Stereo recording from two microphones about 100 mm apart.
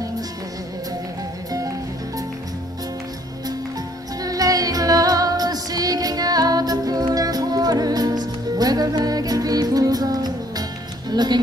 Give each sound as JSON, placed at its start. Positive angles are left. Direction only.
{"t": 4.2, "sound": "music", "side_deg": -40}